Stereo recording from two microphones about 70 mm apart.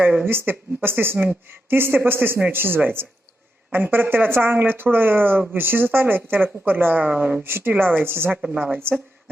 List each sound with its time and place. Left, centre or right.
0.3 s a woman's voice: right; by 7.4 s centre
7.4 s a woman's voice: right